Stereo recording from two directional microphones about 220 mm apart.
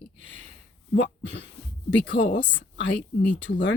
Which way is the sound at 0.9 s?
50° left (ahead or behind).